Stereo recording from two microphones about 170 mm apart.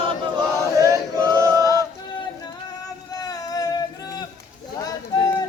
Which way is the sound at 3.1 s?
20° left (ahead or behind).